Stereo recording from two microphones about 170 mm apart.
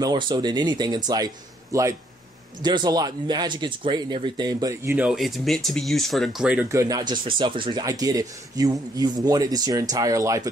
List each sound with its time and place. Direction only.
0.0 s speech: 25° right (ahead or behind)
4.9 s speech: 5° right (ahead or behind)